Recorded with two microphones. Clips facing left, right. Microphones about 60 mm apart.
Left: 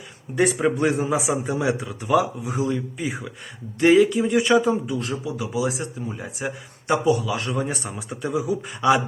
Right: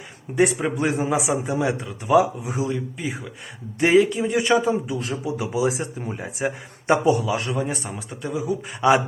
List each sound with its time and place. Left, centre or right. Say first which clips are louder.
0.4 s speech: left 3 dB; centre
5.2 s speech: right 2 dB; right
7.3 s speech: right 1 dB; centre
8.8 s speech: right 1 dB; centre